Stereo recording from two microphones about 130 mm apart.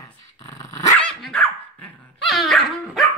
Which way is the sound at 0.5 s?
20° left (ahead or behind).